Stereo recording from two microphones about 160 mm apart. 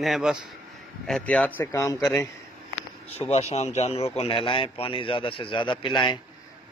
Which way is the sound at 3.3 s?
40° left (ahead or behind).